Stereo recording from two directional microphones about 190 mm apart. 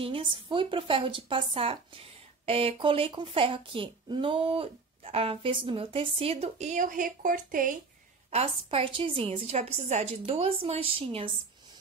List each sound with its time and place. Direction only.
0.0 s a woman's voice: 25° right (ahead or behind); by 7.7 s 45° right (ahead or behind)
8.3 s a woman's voice: 30° right (ahead or behind)